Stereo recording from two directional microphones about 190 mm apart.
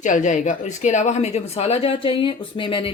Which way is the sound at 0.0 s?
40° left (ahead or behind).